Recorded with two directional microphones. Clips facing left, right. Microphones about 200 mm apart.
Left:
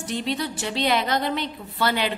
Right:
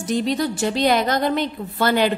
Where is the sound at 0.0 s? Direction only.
45° right (ahead or behind).